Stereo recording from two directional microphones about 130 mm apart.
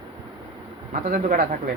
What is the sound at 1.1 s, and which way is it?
Speech, 90° right.